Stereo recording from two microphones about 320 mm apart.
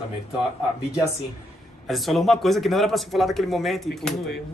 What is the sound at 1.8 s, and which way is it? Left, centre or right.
Speech, centre.